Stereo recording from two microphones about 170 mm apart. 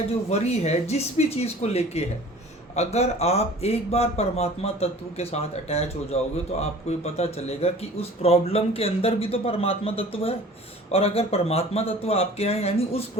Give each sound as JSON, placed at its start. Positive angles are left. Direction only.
{"t": 0.3, "sound": "speech", "side_deg": 40}